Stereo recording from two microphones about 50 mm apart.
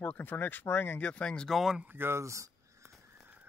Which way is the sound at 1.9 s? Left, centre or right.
Right.